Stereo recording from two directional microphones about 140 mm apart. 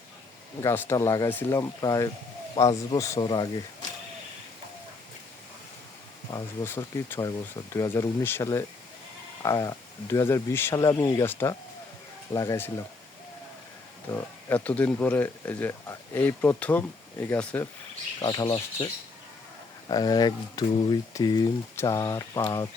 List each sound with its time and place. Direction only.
0.6 s speech: 15° left (ahead or behind)
6.3 s speech: 20° left (ahead or behind)
14.1 s speech: 10° left (ahead or behind)
18.2 s speech: 30° left (ahead or behind)
19.9 s speech: 30° left (ahead or behind)